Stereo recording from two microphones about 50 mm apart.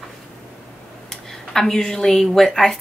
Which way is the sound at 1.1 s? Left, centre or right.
Centre.